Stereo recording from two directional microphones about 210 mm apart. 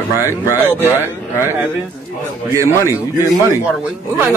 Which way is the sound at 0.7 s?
10° right (ahead or behind).